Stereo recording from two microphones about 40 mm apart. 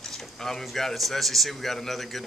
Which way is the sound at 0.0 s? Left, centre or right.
Centre.